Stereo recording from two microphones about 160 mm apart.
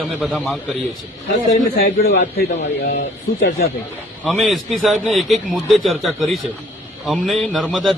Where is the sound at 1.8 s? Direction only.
75° left (ahead or behind).